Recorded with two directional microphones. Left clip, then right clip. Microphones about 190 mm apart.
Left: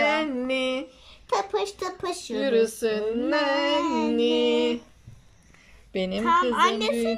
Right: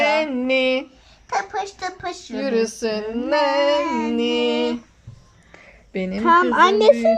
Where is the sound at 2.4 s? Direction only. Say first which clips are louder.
Right 1 dB; 15° right (ahead or behind).